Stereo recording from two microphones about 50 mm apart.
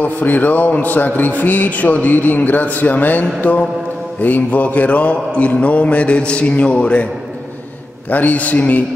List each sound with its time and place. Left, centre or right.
0.0 s a man's voice: left
4.2 s mantra: left
8.1 s a man's voice: left